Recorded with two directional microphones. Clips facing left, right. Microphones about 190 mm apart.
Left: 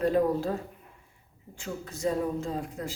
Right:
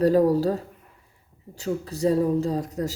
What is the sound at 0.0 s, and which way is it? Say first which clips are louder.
Speech: right 6 dB; 35° right (ahead or behind).